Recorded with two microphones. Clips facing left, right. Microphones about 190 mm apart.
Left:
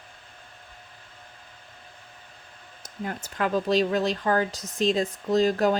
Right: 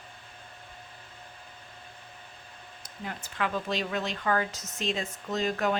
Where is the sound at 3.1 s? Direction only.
45° left (ahead or behind).